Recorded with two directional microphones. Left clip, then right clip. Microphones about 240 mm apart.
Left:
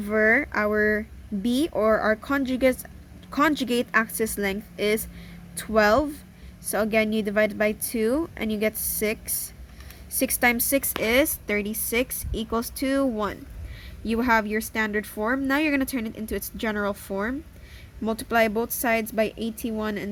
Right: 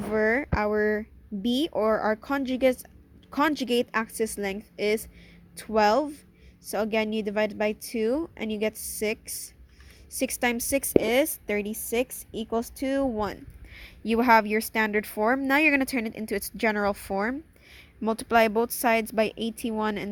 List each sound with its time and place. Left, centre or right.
0.1 s a woman's voice: centre; by 20.1 s right